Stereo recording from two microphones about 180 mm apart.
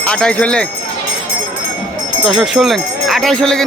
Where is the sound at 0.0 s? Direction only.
5° left (ahead or behind).